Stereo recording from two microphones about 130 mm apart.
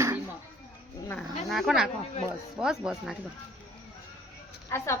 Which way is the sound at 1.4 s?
Centre (ahead or behind).